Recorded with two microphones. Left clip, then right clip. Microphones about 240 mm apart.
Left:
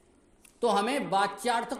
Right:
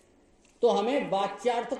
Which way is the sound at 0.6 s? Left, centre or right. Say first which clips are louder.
Right 2 dB; left.